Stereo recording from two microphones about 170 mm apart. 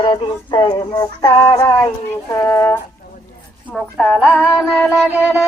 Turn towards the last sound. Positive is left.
turn(degrees=-5)  # may be behind; listen again after turning